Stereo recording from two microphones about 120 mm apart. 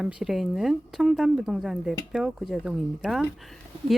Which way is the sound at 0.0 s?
5° right (ahead or behind).